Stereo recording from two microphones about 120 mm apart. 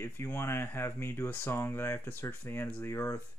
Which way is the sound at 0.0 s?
20° left (ahead or behind).